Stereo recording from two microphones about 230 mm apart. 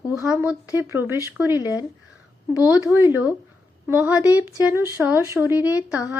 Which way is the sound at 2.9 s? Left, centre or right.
Centre.